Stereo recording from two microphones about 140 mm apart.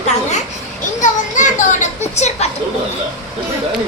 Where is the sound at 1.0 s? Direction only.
65° left (ahead or behind).